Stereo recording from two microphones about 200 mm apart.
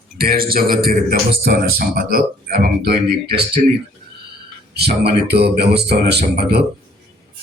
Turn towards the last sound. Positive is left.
turn(degrees=-55)  # may be behind; listen again after turning